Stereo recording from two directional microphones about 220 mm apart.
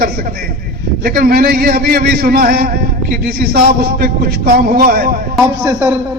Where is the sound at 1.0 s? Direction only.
45° right (ahead or behind).